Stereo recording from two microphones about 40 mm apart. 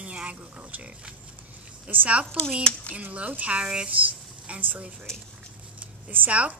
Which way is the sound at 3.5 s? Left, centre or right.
Right.